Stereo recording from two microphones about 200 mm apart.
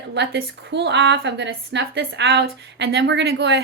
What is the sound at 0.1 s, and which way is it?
A woman's voice, 60° right (ahead or behind).